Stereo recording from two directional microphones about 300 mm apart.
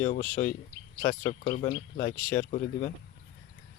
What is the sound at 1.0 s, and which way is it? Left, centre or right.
Speech, left.